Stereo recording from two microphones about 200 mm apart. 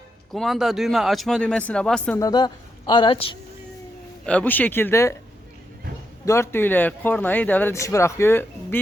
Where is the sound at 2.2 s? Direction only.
20° left (ahead or behind).